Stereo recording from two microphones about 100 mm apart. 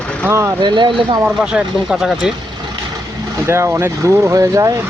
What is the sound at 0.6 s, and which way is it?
Speech, 50° right (ahead or behind).